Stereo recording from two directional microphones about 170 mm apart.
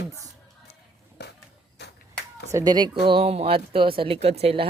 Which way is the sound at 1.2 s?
85° left.